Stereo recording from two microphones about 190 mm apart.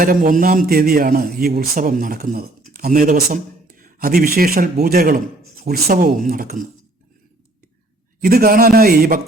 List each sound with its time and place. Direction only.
0.0 s a man's voice: 45° right (ahead or behind)
8.2 s a man's voice: 50° right (ahead or behind)